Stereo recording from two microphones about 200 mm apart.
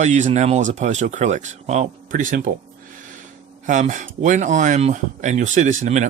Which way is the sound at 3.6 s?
40° right (ahead or behind).